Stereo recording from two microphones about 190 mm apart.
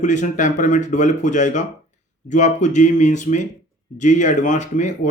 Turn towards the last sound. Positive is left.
turn(degrees=40)  # may be behind; listen again after turning